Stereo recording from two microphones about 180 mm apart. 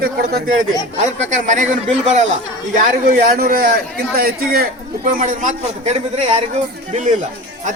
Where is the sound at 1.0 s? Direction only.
40° right (ahead or behind).